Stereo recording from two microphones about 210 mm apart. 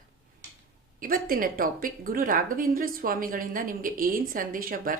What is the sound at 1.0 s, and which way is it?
A woman's voice, 40° right (ahead or behind).